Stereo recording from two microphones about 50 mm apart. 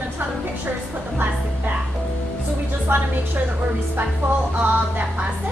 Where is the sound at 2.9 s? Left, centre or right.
Right.